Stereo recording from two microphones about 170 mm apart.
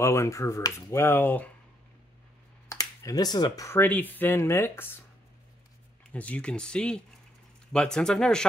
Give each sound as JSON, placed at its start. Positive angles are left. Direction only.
{"t": 0.0, "sound": "speech", "side_deg": 15}
{"t": 2.7, "sound": "speech", "side_deg": 20}
{"t": 6.1, "sound": "speech", "side_deg": 10}